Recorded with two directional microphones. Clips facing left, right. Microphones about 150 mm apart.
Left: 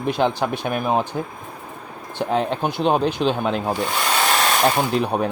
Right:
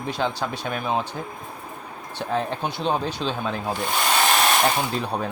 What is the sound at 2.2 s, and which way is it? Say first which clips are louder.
Speech: left 5 dB; 70° left (ahead or behind).